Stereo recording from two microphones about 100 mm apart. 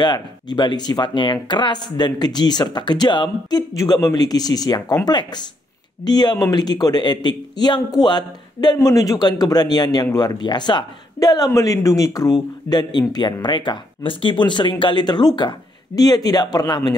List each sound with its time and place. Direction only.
0.0 s speech: 45° left (ahead or behind)
11.1 s speech: 40° left (ahead or behind)